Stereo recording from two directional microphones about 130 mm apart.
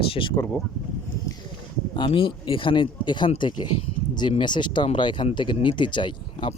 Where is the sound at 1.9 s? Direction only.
40° left (ahead or behind).